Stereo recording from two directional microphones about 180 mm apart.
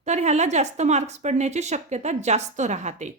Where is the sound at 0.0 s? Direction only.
40° right (ahead or behind).